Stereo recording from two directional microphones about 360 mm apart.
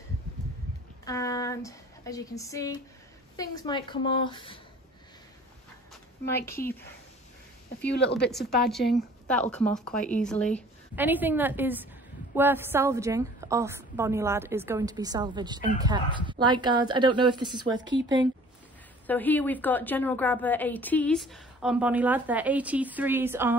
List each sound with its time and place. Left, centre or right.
1.0 s speech: centre
6.2 s speech: centre
7.9 s speech: left
8.3 s a woman's voice: centre
19.0 s a woman's voice: centre